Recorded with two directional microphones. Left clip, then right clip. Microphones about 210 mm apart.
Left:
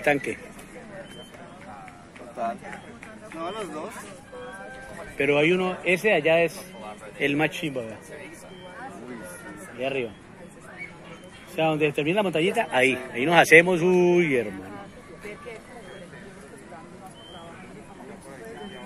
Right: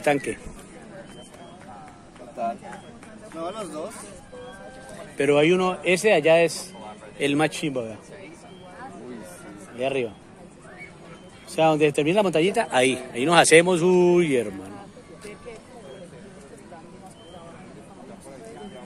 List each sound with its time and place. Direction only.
0.0 s a man's voice: 10° right (ahead or behind)
3.3 s speech: 45° right (ahead or behind)
5.1 s a man's voice: 20° right (ahead or behind)
9.8 s speech: 20° right (ahead or behind)
11.5 s a man's voice: 25° right (ahead or behind)